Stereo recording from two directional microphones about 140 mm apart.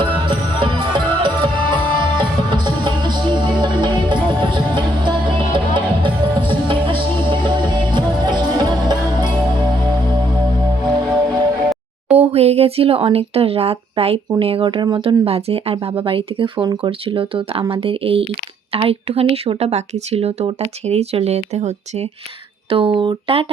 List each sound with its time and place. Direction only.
0.0 s music: 35° right (ahead or behind)
12.1 s speech: 50° right (ahead or behind)
22.7 s speech: 40° right (ahead or behind)